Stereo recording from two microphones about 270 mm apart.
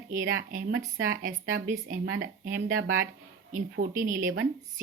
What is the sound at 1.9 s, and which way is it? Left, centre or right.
A woman's voice, right.